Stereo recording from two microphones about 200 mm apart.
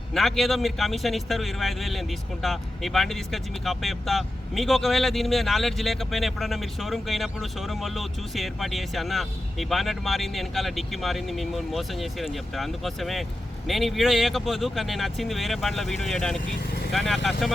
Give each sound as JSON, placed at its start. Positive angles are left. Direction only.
{"t": 0.1, "sound": "a man's voice", "side_deg": 0}